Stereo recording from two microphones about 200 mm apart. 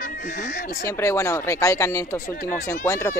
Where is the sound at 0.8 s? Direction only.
15° left (ahead or behind).